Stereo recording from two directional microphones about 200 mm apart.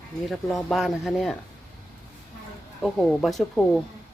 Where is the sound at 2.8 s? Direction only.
Centre (ahead or behind).